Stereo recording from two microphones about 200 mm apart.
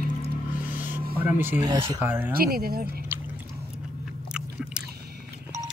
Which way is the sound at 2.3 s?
50° right (ahead or behind).